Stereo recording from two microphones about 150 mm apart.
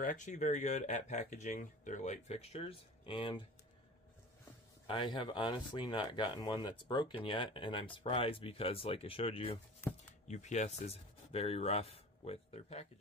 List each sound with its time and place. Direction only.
0.0 s speech: 55° left (ahead or behind); by 3.4 s 35° left (ahead or behind)
4.8 s speech: 30° left (ahead or behind)
9.8 s a sound: 15° left (ahead or behind)
10.2 s speech: 50° left (ahead or behind)